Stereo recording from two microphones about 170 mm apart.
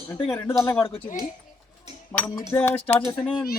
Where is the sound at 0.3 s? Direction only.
10° left (ahead or behind).